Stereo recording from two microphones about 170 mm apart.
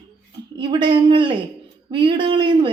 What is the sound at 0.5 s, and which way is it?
A woman's voice, 25° right (ahead or behind).